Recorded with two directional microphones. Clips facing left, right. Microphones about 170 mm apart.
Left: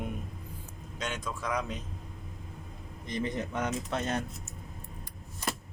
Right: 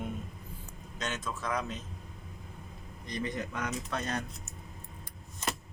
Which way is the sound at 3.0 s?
25° left (ahead or behind).